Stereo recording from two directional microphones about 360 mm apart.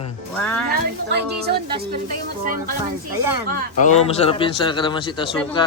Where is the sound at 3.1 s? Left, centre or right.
Right.